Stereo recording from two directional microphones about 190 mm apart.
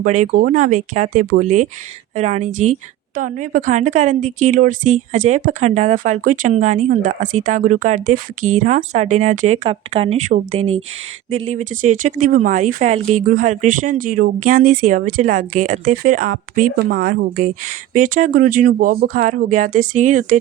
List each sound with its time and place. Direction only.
0.0 s speech: 40° right (ahead or behind)